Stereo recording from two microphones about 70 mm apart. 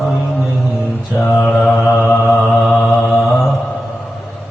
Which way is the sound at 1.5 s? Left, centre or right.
Centre.